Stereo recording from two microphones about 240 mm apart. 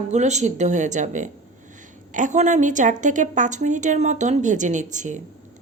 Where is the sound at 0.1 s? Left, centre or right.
Right.